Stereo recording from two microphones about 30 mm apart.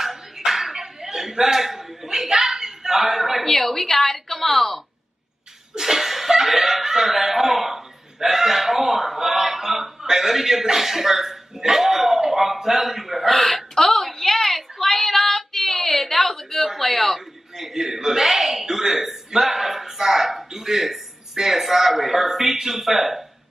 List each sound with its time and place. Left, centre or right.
0.5 s chuckle: centre
3.4 s a woman's voice: centre
5.8 s chuckle: centre
10.0 s a man's voice: centre
13.3 s speech: centre
13.7 s child singing: centre
16.6 s speech: centre
17.6 s speech: centre